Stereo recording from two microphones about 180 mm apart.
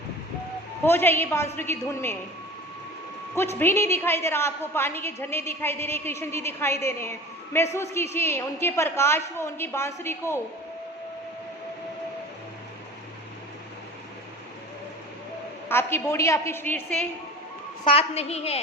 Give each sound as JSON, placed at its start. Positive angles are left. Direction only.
{"t": 0.9, "sound": "a woman's voice", "side_deg": 10}
{"t": 3.3, "sound": "a woman's voice", "side_deg": 15}
{"t": 15.7, "sound": "a woman's voice", "side_deg": 15}
{"t": 17.9, "sound": "a woman's voice", "side_deg": 35}